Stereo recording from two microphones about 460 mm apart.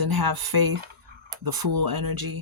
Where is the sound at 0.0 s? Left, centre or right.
Right.